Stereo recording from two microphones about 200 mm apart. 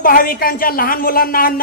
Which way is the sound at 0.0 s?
45° left (ahead or behind).